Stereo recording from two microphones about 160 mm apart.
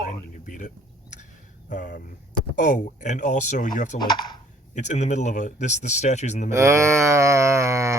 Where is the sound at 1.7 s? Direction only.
55° left (ahead or behind).